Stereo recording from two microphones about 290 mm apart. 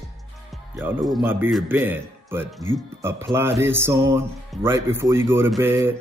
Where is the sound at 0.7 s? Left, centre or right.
Centre.